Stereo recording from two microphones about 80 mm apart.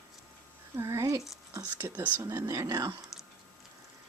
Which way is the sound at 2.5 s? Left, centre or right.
Right.